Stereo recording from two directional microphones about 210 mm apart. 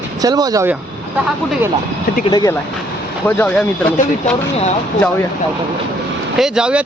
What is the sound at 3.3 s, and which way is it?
Speech, 5° left (ahead or behind).